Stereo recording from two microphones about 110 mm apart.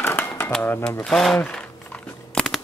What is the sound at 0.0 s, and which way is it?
Typewriter, 20° left (ahead or behind).